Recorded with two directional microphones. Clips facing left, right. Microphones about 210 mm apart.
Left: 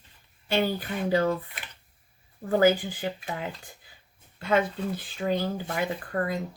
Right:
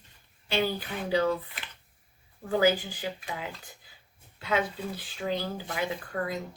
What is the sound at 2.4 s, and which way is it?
Speech, 50° left (ahead or behind).